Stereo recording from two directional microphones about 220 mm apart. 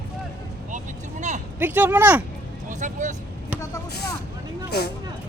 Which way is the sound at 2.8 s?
35° right (ahead or behind).